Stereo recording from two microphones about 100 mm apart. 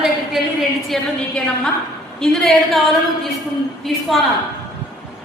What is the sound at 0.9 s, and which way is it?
Speech, 5° left (ahead or behind).